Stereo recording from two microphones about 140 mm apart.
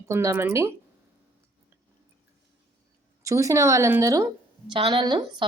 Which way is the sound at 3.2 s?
25° right (ahead or behind).